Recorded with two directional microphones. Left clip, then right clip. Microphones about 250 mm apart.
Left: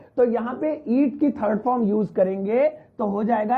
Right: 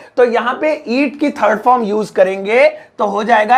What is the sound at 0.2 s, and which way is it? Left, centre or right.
Speech, centre.